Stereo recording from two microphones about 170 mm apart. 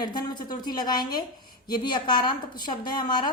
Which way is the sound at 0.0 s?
25° left (ahead or behind).